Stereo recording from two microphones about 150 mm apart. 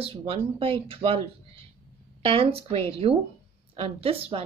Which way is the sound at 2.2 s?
40° right (ahead or behind).